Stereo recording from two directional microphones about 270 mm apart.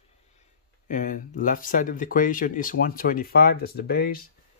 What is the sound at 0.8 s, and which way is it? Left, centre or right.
Speech, left.